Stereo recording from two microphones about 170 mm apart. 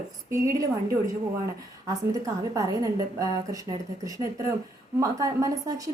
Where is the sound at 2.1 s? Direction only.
20° right (ahead or behind).